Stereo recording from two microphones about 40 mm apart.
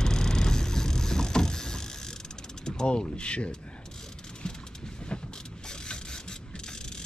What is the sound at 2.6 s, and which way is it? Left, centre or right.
Mechanisms, left.